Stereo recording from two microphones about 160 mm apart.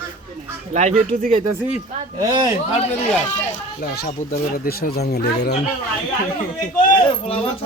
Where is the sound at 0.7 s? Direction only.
45° right (ahead or behind).